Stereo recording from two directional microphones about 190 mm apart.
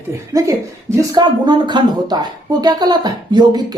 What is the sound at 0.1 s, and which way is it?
A woman's voice, 15° right (ahead or behind).